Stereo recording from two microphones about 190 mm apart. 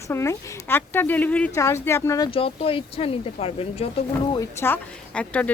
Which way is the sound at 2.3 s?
30° left (ahead or behind).